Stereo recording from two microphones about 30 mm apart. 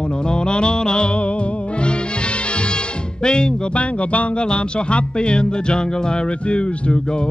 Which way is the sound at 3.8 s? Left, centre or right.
Left.